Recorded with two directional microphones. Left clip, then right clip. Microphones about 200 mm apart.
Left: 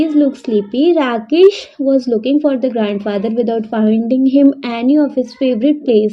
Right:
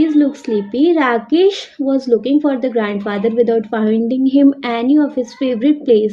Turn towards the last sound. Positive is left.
turn(degrees=30)  # may be behind; listen again after turning